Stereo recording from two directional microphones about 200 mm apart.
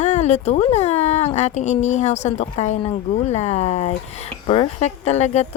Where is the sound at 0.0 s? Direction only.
35° left (ahead or behind).